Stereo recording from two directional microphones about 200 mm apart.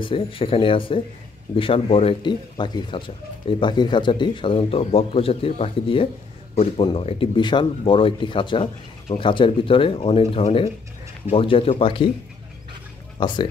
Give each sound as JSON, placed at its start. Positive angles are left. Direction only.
{"t": 0.0, "sound": "speech", "side_deg": 25}
{"t": 13.2, "sound": "speech", "side_deg": 25}